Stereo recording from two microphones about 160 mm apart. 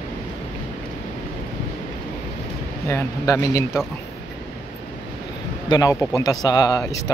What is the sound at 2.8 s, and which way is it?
Speech, 20° left (ahead or behind).